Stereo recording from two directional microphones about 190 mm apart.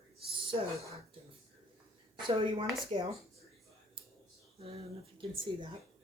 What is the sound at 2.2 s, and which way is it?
Speech, 30° right (ahead or behind).